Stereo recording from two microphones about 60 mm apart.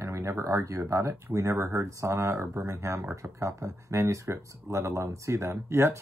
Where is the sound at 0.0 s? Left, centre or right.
Right.